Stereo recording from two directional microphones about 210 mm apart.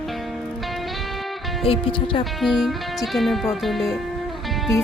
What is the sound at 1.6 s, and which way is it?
Speech, 25° left (ahead or behind).